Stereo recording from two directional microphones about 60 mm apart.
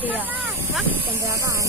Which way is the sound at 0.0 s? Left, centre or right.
Right.